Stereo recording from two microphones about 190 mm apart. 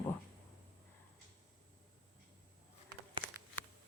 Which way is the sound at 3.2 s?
15° left (ahead or behind).